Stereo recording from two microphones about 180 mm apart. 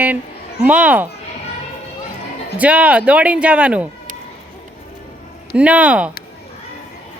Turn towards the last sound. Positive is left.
turn(degrees=-5)  # may be behind; listen again after turning